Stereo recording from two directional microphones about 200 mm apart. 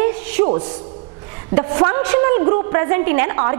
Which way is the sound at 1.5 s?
15° right (ahead or behind).